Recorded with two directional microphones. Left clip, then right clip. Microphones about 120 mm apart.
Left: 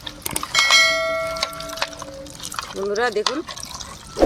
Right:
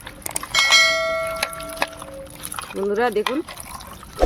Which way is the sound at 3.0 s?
80° right.